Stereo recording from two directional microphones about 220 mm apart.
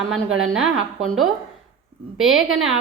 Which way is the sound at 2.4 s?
65° right (ahead or behind).